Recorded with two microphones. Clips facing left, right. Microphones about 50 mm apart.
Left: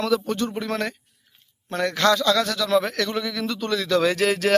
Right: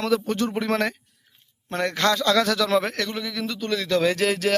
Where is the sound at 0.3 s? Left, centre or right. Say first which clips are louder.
Right 2 dB; right.